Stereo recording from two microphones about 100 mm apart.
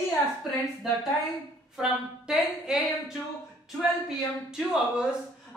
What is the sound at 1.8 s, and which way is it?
A woman's voice, 5° right (ahead or behind).